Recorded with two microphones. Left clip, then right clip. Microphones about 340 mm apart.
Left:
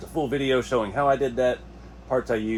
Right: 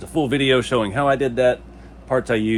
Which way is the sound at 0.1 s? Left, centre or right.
Right.